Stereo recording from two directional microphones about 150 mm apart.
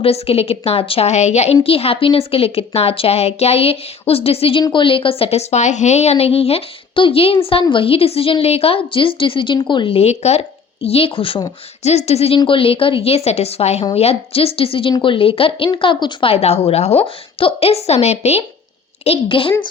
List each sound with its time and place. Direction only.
0.0 s a woman's voice: 40° left (ahead or behind)